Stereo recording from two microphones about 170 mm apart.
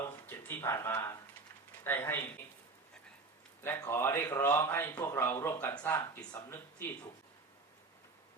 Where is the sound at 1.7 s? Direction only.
10° left (ahead or behind).